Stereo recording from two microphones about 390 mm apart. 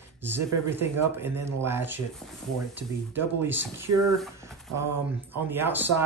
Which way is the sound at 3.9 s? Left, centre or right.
Right.